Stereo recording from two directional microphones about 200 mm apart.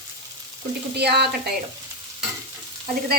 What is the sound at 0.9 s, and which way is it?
Frying, 55° right (ahead or behind).